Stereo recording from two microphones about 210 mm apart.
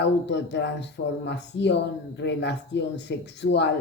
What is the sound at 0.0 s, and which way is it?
Speech, 55° left (ahead or behind).